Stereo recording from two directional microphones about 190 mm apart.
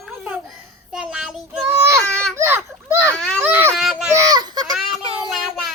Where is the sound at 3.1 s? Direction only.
5° left (ahead or behind).